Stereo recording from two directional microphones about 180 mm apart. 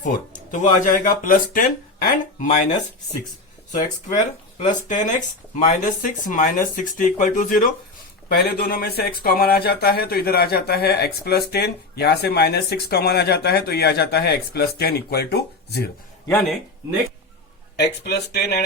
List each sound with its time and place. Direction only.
0.5 s speech: 45° left (ahead or behind)
3.8 s speech: 40° left (ahead or behind); by 15.9 s 65° left (ahead or behind)
17.7 s speech: 65° left (ahead or behind)